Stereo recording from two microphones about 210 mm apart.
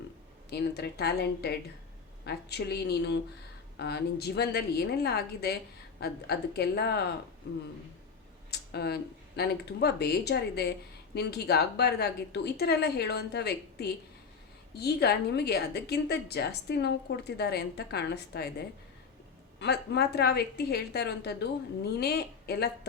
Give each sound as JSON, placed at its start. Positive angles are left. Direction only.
{"t": 0.5, "sound": "speech", "side_deg": 50}
{"t": 8.4, "sound": "speech", "side_deg": 50}